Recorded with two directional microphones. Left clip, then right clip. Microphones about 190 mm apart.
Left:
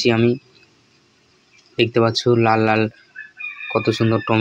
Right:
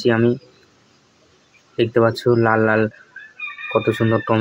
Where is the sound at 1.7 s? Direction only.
30° left (ahead or behind).